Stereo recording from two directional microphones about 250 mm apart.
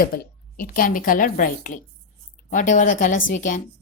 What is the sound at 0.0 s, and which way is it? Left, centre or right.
A woman's voice, left.